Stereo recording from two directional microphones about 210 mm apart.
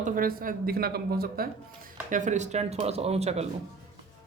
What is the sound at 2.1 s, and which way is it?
Speech, 35° right (ahead or behind).